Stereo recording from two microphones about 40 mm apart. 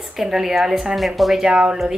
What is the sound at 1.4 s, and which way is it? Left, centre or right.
Speech, right.